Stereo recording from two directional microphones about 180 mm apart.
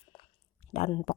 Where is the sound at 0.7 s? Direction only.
35° left (ahead or behind).